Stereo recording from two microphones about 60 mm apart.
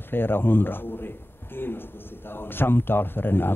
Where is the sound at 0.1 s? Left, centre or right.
Left.